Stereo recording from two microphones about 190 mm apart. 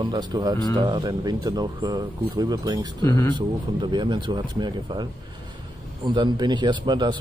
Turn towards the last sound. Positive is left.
turn(degrees=-25)  # may be behind; listen again after turning